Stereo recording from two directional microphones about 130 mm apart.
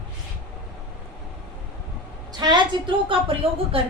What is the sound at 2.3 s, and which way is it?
A woman's voice, 35° right (ahead or behind).